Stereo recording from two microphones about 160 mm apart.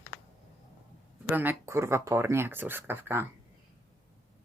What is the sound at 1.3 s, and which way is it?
Speech, 10° right (ahead or behind).